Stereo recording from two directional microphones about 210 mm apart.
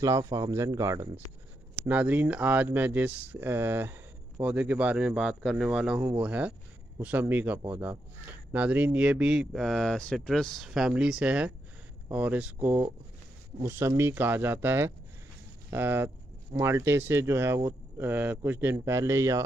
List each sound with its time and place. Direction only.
0.0 s a man's voice: 15° right (ahead or behind)
5.9 s a man's voice: 15° right (ahead or behind)